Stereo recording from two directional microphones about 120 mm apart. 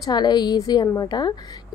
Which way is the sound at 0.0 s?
35° left (ahead or behind).